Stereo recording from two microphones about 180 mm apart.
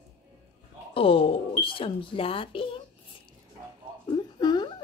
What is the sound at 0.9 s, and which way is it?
A woman's voice, 30° left (ahead or behind).